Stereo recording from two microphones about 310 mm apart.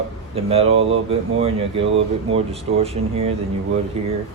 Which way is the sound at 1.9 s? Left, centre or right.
Centre.